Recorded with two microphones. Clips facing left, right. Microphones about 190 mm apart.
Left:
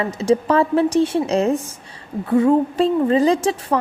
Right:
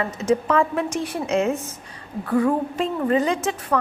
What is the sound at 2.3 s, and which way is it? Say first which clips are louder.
A woman's voice: left 5 dB; 25° left (ahead or behind).